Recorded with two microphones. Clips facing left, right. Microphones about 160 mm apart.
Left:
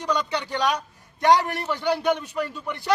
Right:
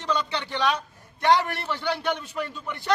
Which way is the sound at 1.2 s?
40° left (ahead or behind).